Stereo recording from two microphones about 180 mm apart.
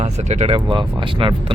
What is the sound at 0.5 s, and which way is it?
Speech, 25° right (ahead or behind).